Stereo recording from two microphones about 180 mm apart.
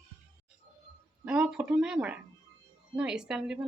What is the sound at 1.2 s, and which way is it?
Speech, 5° right (ahead or behind).